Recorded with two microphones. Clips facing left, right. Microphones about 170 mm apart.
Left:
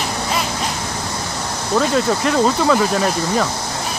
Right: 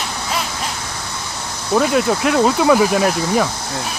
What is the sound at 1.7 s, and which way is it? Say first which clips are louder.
Speech: right 1 dB; 5° right (ahead or behind).